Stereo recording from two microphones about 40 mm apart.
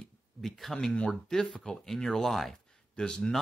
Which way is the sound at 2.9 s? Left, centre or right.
Centre.